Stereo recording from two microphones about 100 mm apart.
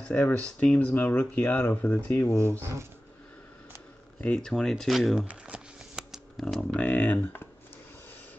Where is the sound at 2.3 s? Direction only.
25° right (ahead or behind).